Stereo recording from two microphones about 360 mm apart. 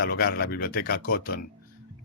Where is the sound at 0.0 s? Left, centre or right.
Left.